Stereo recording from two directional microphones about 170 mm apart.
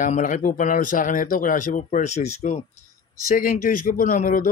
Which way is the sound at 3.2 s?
55° left (ahead or behind).